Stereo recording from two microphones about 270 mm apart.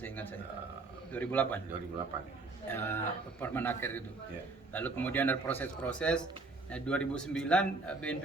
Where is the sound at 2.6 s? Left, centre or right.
Centre.